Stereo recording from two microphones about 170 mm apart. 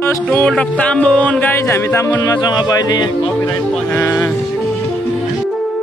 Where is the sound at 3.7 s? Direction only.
10° left (ahead or behind).